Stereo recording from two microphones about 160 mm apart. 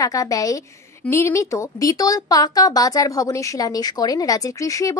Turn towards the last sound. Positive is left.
turn(degrees=20)  # may be behind; listen again after turning